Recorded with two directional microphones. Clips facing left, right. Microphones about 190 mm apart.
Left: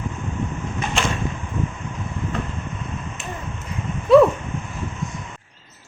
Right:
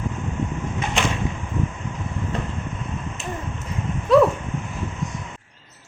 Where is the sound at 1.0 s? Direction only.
15° right (ahead or behind).